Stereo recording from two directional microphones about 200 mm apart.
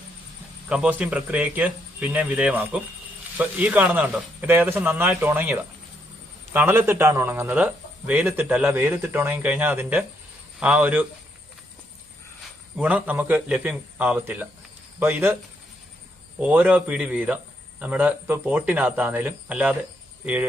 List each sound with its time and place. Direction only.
0.7 s a man's voice: 5° right (ahead or behind)
12.7 s a man's voice: 5° right (ahead or behind)
16.4 s a man's voice: 5° right (ahead or behind)